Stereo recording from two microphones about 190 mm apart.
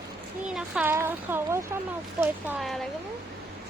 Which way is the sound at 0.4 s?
5° right (ahead or behind).